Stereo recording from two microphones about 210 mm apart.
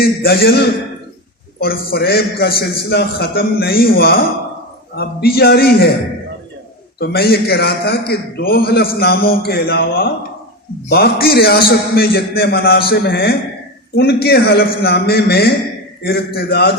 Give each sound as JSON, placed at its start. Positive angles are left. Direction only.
{"t": 0.0, "sound": "a man's voice", "side_deg": 45}
{"t": 7.0, "sound": "a man's voice", "side_deg": 45}